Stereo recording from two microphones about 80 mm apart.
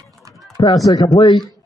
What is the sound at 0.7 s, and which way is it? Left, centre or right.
Speech, left.